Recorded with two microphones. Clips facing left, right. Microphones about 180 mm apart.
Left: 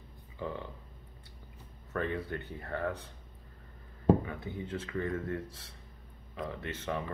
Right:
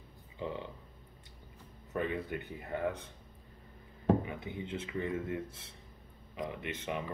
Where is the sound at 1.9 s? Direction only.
15° right (ahead or behind).